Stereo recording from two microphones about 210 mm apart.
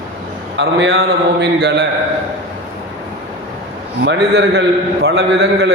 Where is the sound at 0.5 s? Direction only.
55° right (ahead or behind).